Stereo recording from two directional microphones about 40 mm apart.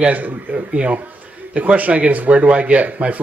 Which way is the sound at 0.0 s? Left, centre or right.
Right.